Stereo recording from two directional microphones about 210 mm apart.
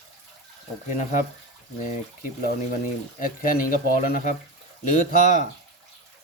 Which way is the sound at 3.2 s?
40° left (ahead or behind).